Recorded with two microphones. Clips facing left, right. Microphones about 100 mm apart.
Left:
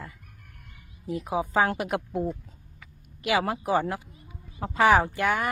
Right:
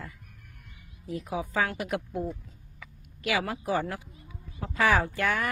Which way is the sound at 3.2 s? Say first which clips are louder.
Left 4 dB; 30° left (ahead or behind).